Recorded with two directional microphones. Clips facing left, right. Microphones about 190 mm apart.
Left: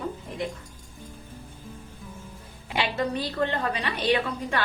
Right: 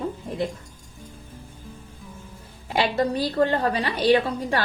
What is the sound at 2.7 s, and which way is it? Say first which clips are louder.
A woman's voice: right 5 dB; 35° right (ahead or behind).